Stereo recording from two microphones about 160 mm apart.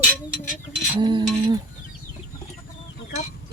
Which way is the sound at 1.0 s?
25° right (ahead or behind).